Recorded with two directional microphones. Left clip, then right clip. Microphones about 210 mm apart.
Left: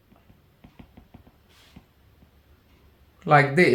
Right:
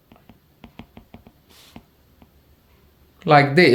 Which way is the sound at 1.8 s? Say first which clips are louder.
Right 8 dB; 60° right (ahead or behind).